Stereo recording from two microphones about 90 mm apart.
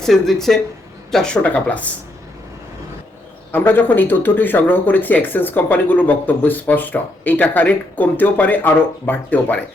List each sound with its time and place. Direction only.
0.0 s speech: 5° left (ahead or behind)
3.5 s speech: 20° left (ahead or behind)